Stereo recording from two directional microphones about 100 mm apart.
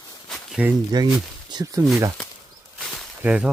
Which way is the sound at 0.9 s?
45° right (ahead or behind).